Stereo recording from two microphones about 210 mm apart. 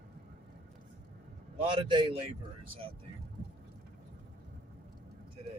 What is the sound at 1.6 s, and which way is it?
Speech, 25° right (ahead or behind).